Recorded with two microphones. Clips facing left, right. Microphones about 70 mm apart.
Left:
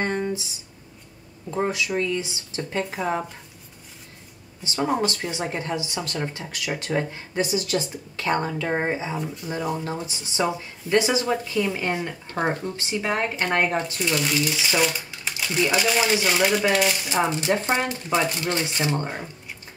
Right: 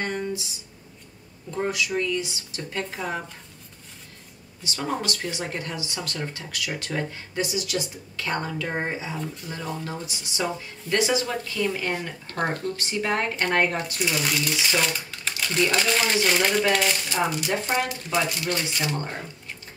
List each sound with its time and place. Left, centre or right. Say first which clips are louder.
0.0 s a sound: left 3 dB; left
1.9 s speech: left 1 dB; left
4.6 s speech: left 5 dB; left
9.8 s speech: left 3 dB; left; by 13.6 s centre
13.6 s speech: left 1 dB; centre
13.9 s speech: left 2 dB; centre
14.7 s speech: left 2 dB; centre
17.1 s speech: left 3 dB; left